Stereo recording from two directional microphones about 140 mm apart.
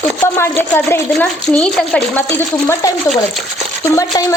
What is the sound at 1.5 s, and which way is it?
Speech, 5° left (ahead or behind).